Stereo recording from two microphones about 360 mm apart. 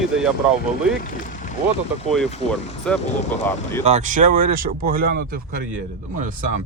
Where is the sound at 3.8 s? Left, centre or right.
Centre.